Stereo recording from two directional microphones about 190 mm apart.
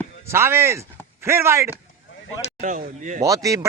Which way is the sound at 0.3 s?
15° right (ahead or behind).